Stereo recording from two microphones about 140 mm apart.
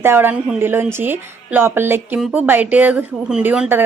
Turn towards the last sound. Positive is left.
turn(degrees=-10)  # may be behind; listen again after turning